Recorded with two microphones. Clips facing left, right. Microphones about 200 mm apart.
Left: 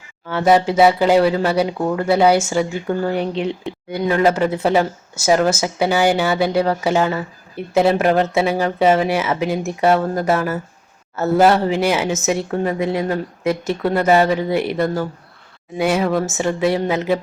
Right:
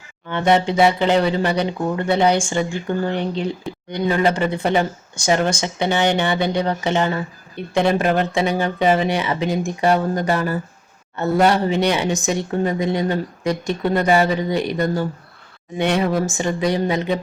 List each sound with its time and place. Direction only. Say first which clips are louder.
0.3 s speech: left 2 dB; 5° left (ahead or behind)